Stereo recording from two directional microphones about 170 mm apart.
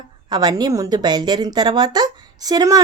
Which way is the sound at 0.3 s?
25° right (ahead or behind).